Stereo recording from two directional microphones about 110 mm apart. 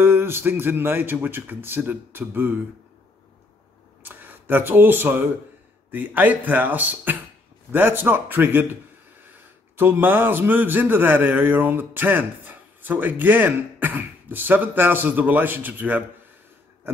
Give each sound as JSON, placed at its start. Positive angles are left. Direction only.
{"t": 0.0, "sound": "speech", "side_deg": -20}
{"t": 4.0, "sound": "a man's voice", "side_deg": -15}
{"t": 9.8, "sound": "a man's voice", "side_deg": -20}
{"t": 16.8, "sound": "pig", "side_deg": -20}